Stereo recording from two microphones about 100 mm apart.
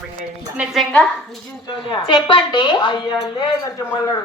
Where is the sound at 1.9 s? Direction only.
50° left (ahead or behind).